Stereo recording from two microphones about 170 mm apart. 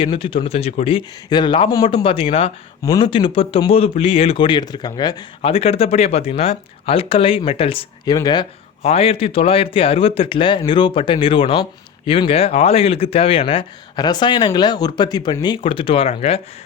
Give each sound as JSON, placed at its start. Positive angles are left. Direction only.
{"t": 0.0, "sound": "speech", "side_deg": 30}
{"t": 8.8, "sound": "speech", "side_deg": 35}